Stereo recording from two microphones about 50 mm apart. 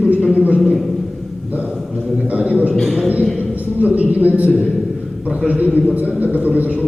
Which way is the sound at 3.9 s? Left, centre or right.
Right.